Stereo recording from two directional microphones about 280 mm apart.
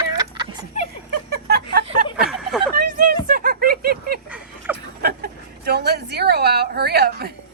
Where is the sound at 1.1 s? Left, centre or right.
Right.